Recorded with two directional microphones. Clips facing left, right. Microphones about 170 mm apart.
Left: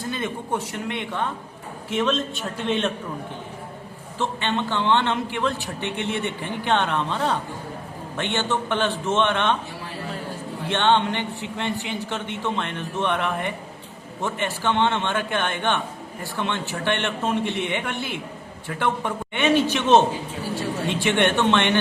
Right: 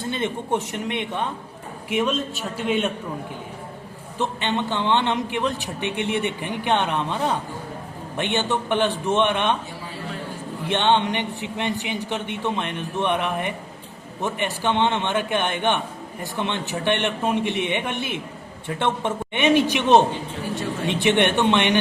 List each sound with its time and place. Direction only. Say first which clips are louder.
0.0 s a man's voice: right 2 dB; 25° right (ahead or behind); by 2.9 s 10° right (ahead or behind)
4.2 s a man's voice: right 1 dB; 15° right (ahead or behind)
10.7 s a man's voice: even; 15° right (ahead or behind)